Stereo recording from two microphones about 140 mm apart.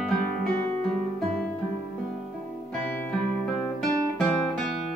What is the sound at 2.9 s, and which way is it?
Music, 5° left (ahead or behind).